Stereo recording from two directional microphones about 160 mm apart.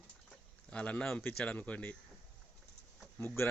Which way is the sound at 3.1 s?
15° left (ahead or behind).